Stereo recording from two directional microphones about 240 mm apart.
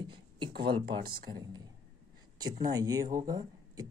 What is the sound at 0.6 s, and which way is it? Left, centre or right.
Speech, centre.